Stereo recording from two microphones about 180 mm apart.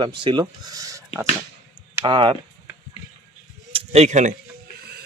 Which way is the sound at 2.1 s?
25° right (ahead or behind).